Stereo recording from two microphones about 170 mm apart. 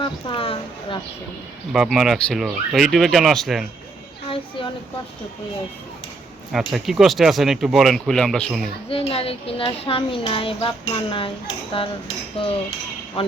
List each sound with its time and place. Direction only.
0.0 s speech: 30° left (ahead or behind)
1.7 s speech: centre (ahead or behind)
6.5 s speech: centre (ahead or behind)
8.9 s a child's voice: 35° left (ahead or behind)